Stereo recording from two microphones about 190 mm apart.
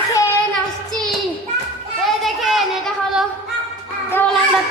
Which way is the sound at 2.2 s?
Centre (ahead or behind).